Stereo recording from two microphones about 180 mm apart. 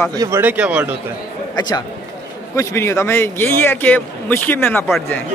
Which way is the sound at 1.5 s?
25° left (ahead or behind).